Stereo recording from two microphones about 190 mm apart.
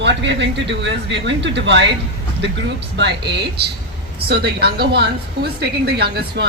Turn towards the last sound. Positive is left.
turn(degrees=-60)  # may be behind; listen again after turning